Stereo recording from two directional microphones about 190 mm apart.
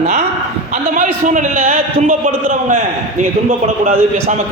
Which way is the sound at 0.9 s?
40° right (ahead or behind).